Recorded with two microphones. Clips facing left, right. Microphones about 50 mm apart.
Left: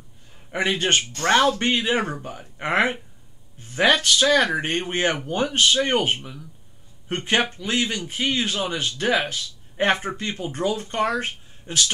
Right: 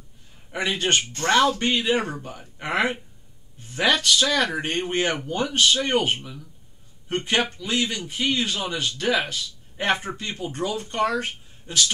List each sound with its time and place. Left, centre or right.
0.5 s a man's voice: centre
3.7 s a man's voice: left